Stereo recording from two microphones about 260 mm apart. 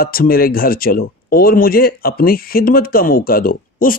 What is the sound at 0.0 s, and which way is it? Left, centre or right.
Speech, left.